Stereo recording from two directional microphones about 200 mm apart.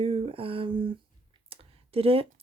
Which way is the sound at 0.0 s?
30° right (ahead or behind).